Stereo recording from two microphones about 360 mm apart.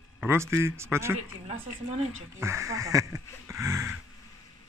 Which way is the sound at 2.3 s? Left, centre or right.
Centre.